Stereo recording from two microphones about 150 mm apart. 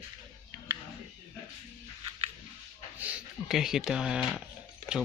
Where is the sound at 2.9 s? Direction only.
10° right (ahead or behind).